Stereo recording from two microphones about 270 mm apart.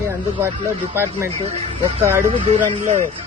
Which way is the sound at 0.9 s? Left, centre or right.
Centre.